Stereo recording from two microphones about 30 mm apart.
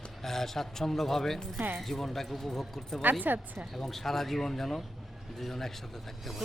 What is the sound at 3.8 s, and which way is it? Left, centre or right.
Speech, centre.